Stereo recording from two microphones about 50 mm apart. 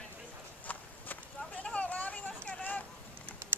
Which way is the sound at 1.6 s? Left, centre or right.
Left.